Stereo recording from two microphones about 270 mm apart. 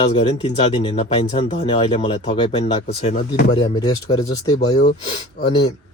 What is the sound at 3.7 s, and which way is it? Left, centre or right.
Speech, centre.